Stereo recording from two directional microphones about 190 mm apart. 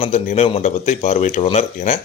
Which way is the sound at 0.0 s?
35° left (ahead or behind).